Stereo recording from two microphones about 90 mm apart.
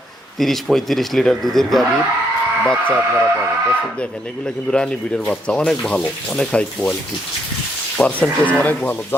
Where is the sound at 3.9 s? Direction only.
10° left (ahead or behind).